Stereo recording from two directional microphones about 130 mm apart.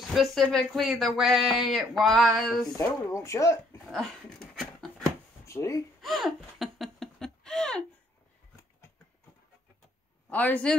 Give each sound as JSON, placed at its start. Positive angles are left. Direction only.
{"t": 0.1, "sound": "speech", "side_deg": 0}
{"t": 2.6, "sound": "speech", "side_deg": 25}
{"t": 3.8, "sound": "dog", "side_deg": 0}
{"t": 5.4, "sound": "a sound", "side_deg": 20}
{"t": 5.9, "sound": "laughter", "side_deg": 0}
{"t": 10.3, "sound": "a man's voice", "side_deg": 10}